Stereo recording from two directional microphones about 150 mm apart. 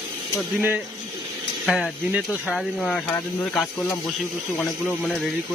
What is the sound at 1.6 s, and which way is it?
Speech, centre (ahead or behind).